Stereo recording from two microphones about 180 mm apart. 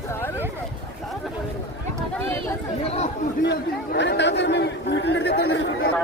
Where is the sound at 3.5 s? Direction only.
70° left (ahead or behind).